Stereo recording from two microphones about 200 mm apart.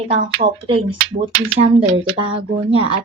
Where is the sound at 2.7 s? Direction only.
25° right (ahead or behind).